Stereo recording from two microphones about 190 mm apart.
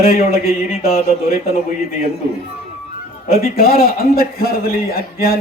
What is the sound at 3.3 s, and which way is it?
A man's voice, 50° left (ahead or behind).